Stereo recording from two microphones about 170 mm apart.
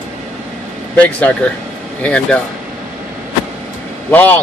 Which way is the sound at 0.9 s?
10° left (ahead or behind).